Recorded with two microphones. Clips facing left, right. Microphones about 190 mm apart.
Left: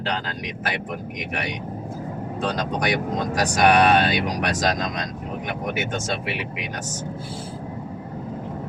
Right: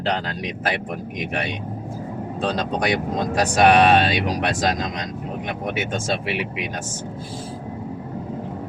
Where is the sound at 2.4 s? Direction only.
30° right (ahead or behind).